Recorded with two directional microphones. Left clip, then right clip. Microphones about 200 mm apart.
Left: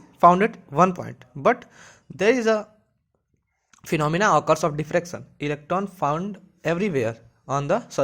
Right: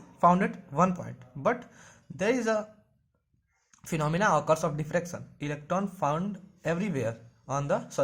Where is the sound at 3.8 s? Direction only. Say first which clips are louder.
Left 6 dB; 35° left (ahead or behind).